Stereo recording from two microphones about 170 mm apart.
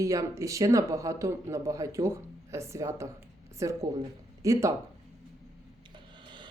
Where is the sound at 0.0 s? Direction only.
20° right (ahead or behind).